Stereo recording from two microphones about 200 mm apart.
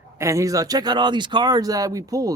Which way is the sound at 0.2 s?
15° right (ahead or behind).